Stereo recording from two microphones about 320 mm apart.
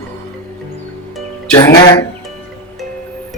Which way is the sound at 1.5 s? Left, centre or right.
Centre.